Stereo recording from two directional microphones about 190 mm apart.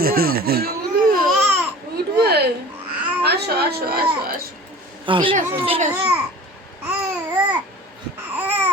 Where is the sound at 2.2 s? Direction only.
60° right (ahead or behind).